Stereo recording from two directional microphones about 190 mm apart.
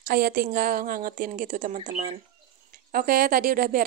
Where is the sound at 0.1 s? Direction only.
50° right (ahead or behind).